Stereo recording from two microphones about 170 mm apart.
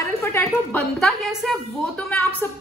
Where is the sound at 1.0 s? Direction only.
Centre (ahead or behind).